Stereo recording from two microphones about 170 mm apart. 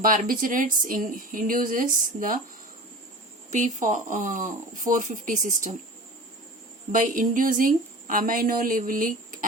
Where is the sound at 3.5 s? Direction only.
45° right (ahead or behind).